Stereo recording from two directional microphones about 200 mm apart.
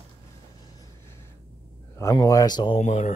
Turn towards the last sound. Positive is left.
turn(degrees=35)  # may be behind; listen again after turning